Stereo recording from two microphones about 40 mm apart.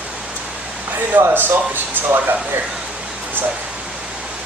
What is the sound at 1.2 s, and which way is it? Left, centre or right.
Speech, right.